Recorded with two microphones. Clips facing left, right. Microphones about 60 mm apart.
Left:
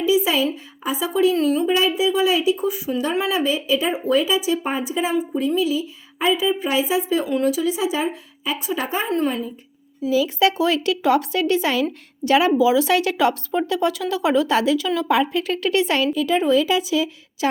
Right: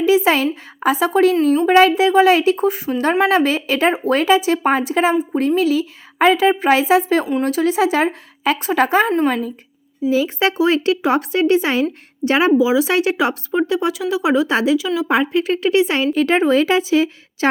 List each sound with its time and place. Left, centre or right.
0.0 s a sound: right
0.5 s speech: right
10.1 s speech: right
14.8 s a woman's voice: centre
15.0 s speech: right
16.1 s speech: right